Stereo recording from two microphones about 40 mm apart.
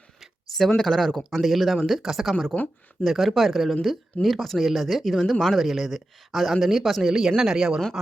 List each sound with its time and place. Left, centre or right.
0.8 s speech: centre
3.0 s speech: centre